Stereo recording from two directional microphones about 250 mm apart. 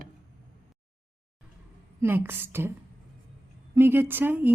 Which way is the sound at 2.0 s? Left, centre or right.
Centre.